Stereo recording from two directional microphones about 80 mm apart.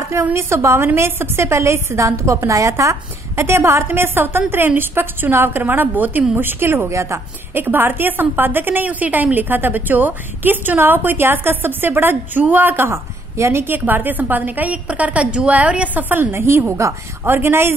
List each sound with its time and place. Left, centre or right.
0.2 s a woman's voice: right
7.5 s a woman's voice: right